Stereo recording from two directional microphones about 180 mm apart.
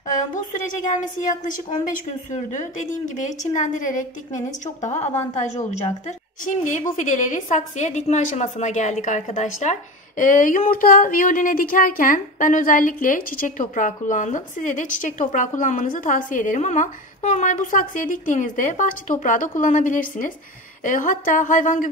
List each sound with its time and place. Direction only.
0.8 s a woman's voice: 45° left (ahead or behind)